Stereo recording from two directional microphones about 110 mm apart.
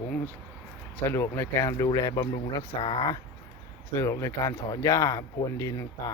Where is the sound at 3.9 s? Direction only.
25° left (ahead or behind).